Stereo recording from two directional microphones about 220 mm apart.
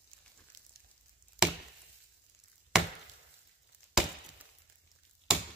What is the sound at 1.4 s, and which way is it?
Chop, 5° right (ahead or behind).